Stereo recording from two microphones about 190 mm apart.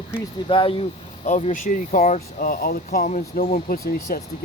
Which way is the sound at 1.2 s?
45° left (ahead or behind).